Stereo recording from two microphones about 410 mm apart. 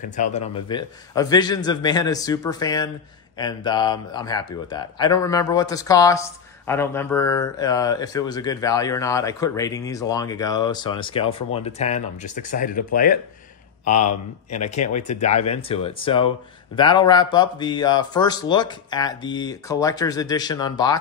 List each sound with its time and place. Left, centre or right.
0.0 s speech: centre
13.8 s speech: left
14.5 s speech: centre